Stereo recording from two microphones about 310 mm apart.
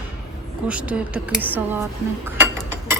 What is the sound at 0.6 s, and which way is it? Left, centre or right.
Speech, centre.